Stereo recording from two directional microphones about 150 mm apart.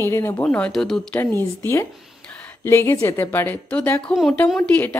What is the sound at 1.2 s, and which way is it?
A woman's voice, 15° left (ahead or behind).